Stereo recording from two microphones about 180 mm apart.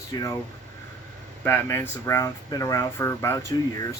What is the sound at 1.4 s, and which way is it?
Speech, 15° left (ahead or behind).